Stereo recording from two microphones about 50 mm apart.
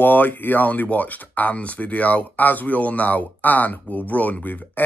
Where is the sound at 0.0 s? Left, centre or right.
Left.